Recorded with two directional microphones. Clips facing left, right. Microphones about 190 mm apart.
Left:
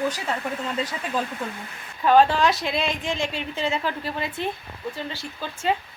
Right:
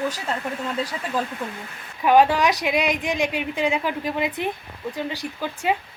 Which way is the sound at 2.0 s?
15° right (ahead or behind).